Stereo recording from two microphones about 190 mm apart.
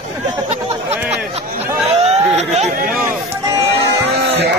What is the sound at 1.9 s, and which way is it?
Chatter, 35° right (ahead or behind).